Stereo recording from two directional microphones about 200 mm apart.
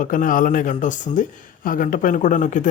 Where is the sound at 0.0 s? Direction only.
40° left (ahead or behind).